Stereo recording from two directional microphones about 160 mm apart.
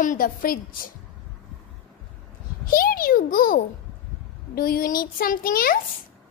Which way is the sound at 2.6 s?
65° left (ahead or behind).